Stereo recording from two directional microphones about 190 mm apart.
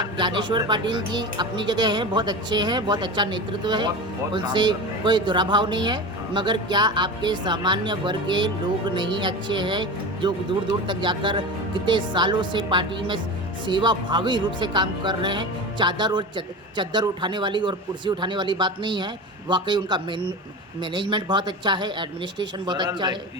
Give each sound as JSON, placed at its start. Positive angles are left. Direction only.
{"t": 0.0, "sound": "speech", "side_deg": -25}